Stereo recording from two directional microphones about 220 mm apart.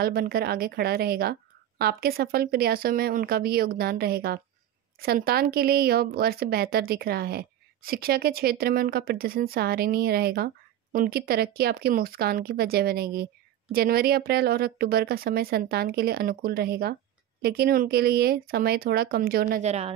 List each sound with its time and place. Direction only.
0.0 s a woman's voice: 45° right (ahead or behind)
19.6 s a woman's voice: 30° right (ahead or behind)